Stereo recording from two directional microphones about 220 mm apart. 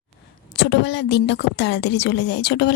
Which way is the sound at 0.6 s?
50° left (ahead or behind).